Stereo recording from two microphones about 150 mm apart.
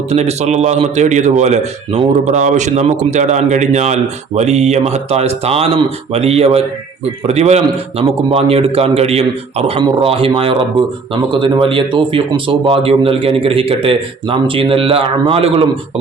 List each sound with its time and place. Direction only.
0.1 s speech: 45° right (ahead or behind)